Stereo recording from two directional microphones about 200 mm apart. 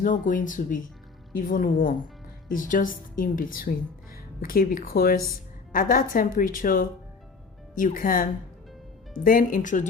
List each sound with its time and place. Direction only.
0.0 s a woman's voice: 40° left (ahead or behind)